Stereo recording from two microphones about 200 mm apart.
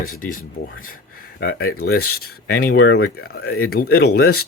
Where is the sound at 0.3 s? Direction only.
45° left (ahead or behind).